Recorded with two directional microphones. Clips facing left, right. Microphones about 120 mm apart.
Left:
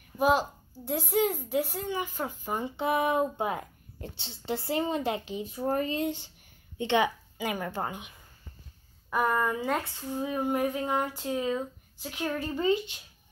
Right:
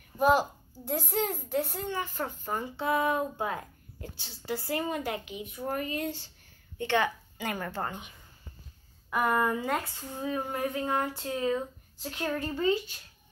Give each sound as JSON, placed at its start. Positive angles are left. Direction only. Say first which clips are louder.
{"t": 0.2, "sound": "a woman's voice", "louder": "right 1 dB", "side_deg": 0}
{"t": 2.4, "sound": "speech", "louder": "left 2 dB", "side_deg": 20}
{"t": 9.1, "sound": "a woman's voice", "louder": "even", "side_deg": 0}
{"t": 9.9, "sound": "speech", "louder": "left 2 dB", "side_deg": 15}
{"t": 12.5, "sound": "speech", "louder": "left 2 dB", "side_deg": 20}